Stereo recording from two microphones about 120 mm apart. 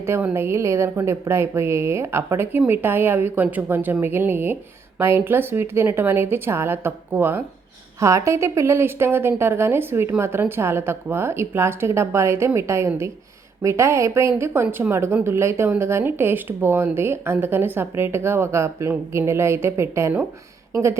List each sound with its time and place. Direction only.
0.0 s a woman's voice: 20° right (ahead or behind)